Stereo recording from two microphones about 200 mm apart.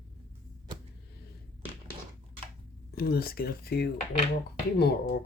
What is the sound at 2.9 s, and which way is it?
Speech, 50° left (ahead or behind).